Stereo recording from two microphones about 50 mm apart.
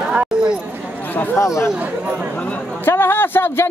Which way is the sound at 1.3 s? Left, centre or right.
Left.